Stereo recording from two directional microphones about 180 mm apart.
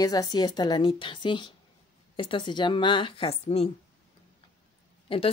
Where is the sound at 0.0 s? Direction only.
20° left (ahead or behind).